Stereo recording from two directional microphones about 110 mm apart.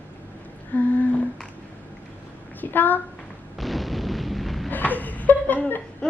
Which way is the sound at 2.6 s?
15° left (ahead or behind).